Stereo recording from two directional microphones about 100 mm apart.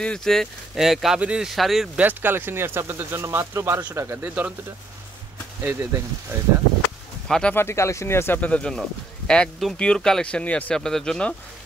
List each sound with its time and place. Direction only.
0.0 s speech: 5° left (ahead or behind)
2.0 s speech: 20° right (ahead or behind)
5.6 s speech: 20° right (ahead or behind)
7.2 s speech: 5° left (ahead or behind)
7.5 s speech: 25° left (ahead or behind)
8.4 s speech: 10° left (ahead or behind)